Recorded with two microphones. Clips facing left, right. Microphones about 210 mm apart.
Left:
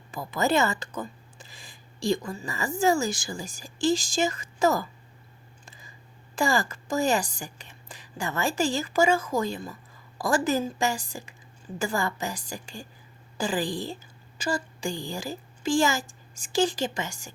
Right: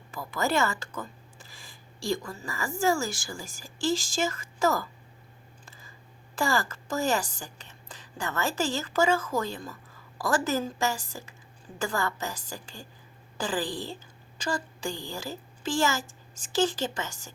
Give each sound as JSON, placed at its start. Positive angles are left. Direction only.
{"t": 0.1, "sound": "speech", "side_deg": 20}
{"t": 5.6, "sound": "a sound", "side_deg": 15}
{"t": 6.3, "sound": "a woman's voice", "side_deg": 15}